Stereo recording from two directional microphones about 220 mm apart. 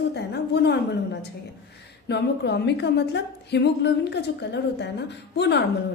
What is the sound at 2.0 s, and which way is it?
A woman's voice, 50° left (ahead or behind).